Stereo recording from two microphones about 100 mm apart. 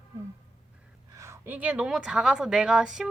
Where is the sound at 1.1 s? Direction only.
30° right (ahead or behind).